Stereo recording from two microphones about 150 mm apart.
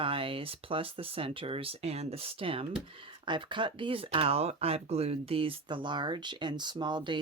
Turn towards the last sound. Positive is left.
turn(degrees=-30)  # may be behind; listen again after turning